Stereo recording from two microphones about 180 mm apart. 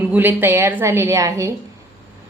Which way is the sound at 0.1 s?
10° right (ahead or behind).